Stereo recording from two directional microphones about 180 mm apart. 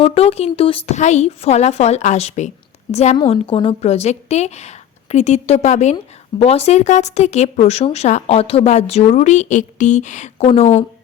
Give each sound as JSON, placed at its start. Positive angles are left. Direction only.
{"t": 0.0, "sound": "speech", "side_deg": 35}